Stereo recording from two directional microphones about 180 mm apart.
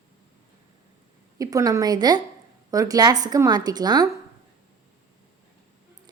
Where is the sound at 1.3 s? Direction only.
20° right (ahead or behind).